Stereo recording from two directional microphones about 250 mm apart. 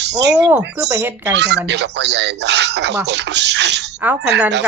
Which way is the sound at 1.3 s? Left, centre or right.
Right.